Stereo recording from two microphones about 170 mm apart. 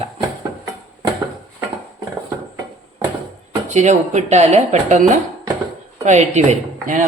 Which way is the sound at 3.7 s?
45° right (ahead or behind).